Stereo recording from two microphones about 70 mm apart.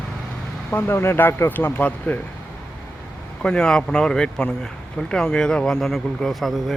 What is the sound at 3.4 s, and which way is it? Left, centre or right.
Speech, centre.